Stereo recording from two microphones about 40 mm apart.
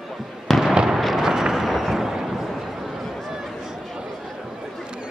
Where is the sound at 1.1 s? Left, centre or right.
Centre.